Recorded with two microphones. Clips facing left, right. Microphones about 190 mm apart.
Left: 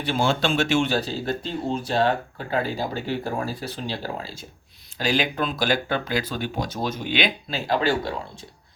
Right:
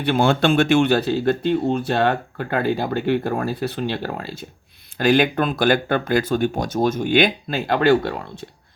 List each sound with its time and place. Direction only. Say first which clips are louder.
0.0 s speech: right 5 dB; 60° right (ahead or behind)